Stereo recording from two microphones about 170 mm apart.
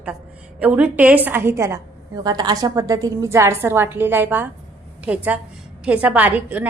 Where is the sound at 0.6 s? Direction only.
10° right (ahead or behind).